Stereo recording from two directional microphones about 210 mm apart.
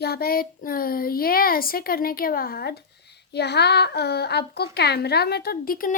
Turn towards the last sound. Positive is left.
turn(degrees=45)  # may be behind; listen again after turning